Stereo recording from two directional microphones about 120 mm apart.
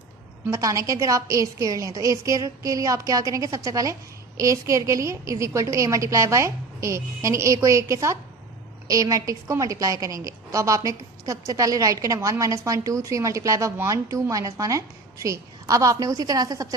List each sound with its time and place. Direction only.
0.5 s a woman's voice: 30° right (ahead or behind)